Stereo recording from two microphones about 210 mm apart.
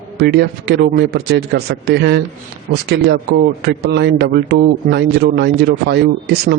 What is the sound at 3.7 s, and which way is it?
Speech, 55° right (ahead or behind).